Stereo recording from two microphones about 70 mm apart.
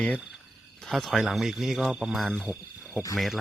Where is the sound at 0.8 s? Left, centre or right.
Centre.